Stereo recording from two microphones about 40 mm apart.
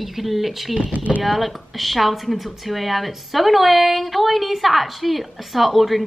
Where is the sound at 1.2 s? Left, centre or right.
Centre.